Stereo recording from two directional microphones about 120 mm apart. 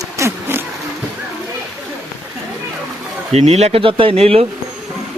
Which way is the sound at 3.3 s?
65° right (ahead or behind).